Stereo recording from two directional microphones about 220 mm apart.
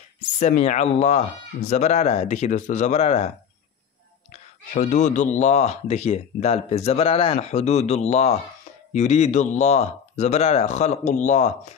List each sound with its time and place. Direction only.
0.4 s speech: 30° left (ahead or behind)
4.3 s speech: 35° left (ahead or behind)